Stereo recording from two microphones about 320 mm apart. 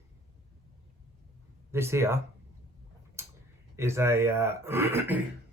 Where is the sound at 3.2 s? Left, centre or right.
Centre.